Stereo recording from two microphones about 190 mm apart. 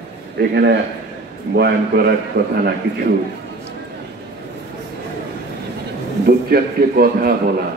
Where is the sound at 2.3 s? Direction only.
45° right (ahead or behind).